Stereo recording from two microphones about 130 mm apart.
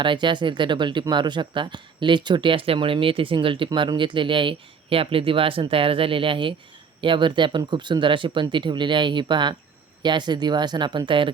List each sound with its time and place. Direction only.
0.0 s speech: 40° right (ahead or behind)